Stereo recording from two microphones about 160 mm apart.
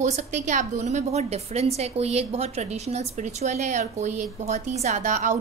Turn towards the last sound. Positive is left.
turn(degrees=-50)  # may be behind; listen again after turning